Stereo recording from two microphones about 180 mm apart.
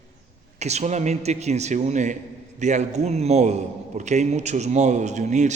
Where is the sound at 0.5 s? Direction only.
40° right (ahead or behind).